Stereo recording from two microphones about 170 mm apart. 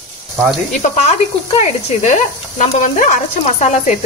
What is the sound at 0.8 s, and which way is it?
Speech, 45° left (ahead or behind).